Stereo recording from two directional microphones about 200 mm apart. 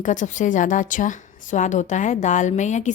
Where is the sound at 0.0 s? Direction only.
40° left (ahead or behind).